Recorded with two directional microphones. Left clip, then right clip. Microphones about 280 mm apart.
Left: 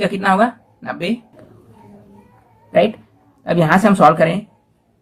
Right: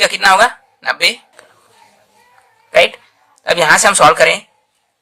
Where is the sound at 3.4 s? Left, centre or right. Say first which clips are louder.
Right 5 dB; right.